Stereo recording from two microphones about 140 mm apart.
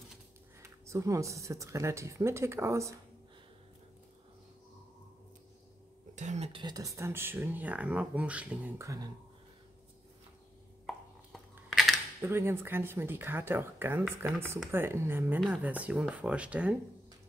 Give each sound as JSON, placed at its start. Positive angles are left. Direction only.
{"t": 0.6, "sound": "speech", "side_deg": -20}
{"t": 6.1, "sound": "a sound", "side_deg": -55}
{"t": 6.5, "sound": "speech", "side_deg": -30}
{"t": 11.7, "sound": "camera", "side_deg": 0}
{"t": 12.2, "sound": "speech", "side_deg": -15}